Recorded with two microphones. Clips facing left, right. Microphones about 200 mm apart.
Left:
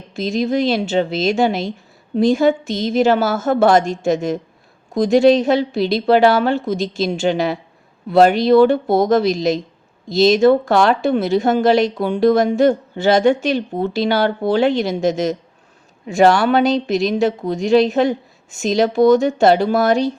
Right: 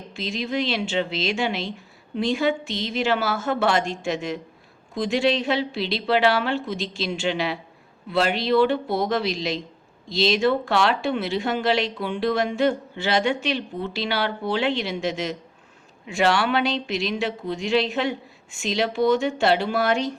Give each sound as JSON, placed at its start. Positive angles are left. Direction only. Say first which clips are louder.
{"t": 0.1, "sound": "speech", "louder": "left 9 dB", "side_deg": 45}